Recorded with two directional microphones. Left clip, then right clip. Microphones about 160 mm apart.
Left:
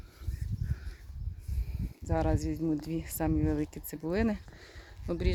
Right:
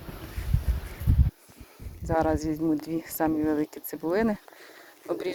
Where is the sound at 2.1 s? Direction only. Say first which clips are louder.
Right 7 dB; 20° left (ahead or behind).